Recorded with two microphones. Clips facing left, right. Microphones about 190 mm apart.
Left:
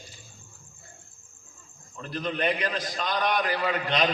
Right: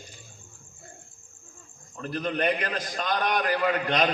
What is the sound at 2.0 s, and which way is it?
A man's voice, 45° right (ahead or behind).